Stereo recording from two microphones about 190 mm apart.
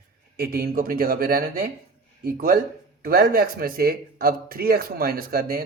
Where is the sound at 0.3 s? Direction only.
50° right (ahead or behind).